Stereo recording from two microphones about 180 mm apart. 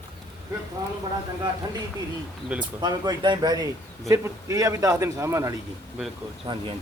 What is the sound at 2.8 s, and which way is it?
A man's voice, 25° right (ahead or behind).